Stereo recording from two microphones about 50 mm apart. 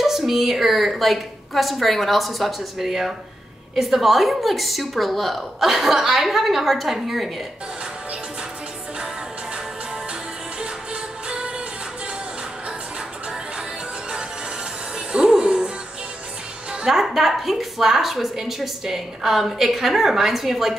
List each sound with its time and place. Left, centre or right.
0.0 s a woman's voice: centre
11.2 s music: centre
15.1 s music: centre
16.8 s a woman's voice: centre